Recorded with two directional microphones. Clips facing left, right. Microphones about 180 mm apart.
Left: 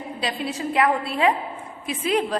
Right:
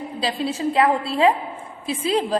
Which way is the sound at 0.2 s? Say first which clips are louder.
Right 4 dB; 30° right (ahead or behind).